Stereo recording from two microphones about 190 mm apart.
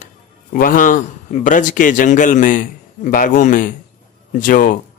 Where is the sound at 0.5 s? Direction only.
45° left (ahead or behind).